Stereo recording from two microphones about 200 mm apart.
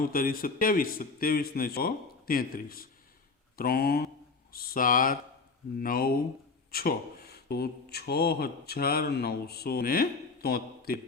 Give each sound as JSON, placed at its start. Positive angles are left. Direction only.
{"t": 0.0, "sound": "speech", "side_deg": 45}